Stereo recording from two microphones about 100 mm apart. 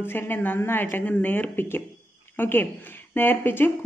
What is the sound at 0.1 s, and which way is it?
A woman's voice, 20° left (ahead or behind).